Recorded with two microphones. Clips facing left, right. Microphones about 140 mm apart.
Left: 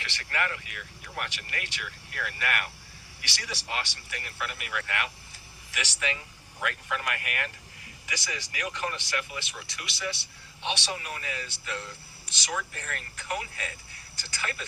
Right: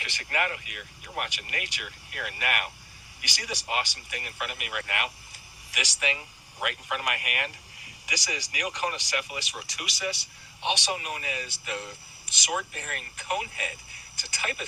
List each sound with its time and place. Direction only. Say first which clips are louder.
0.0 s speech: right 2 dB; 15° right (ahead or behind)